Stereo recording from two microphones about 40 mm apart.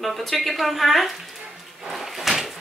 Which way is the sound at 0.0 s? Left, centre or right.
Centre.